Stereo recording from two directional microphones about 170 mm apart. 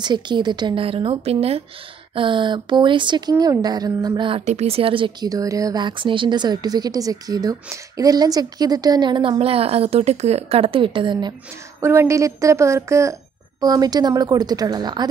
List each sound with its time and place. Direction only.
0.0 s speech: 25° right (ahead or behind)
4.5 s speech: 40° right (ahead or behind)
11.8 s speech: 15° right (ahead or behind)